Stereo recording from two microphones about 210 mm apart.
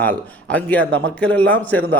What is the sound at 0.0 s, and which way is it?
A man's voice, 10° left (ahead or behind).